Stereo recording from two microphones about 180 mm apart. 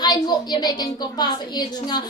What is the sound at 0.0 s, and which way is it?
A woman's voice, 20° left (ahead or behind).